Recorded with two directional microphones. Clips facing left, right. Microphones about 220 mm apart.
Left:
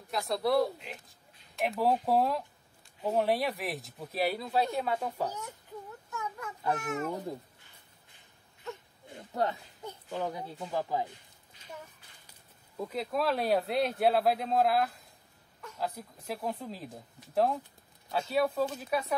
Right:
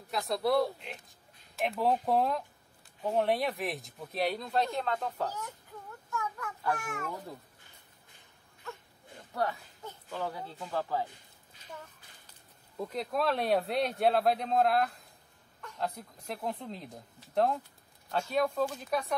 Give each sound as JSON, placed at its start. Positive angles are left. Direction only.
{"t": 0.1, "sound": "speech", "side_deg": 0}
{"t": 6.1, "sound": "a sound", "side_deg": 20}
{"t": 9.3, "sound": "speech", "side_deg": 20}
{"t": 12.7, "sound": "speech", "side_deg": 0}